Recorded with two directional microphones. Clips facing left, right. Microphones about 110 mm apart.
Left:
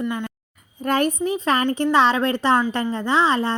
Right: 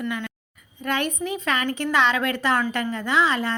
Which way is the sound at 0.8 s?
40° left (ahead or behind).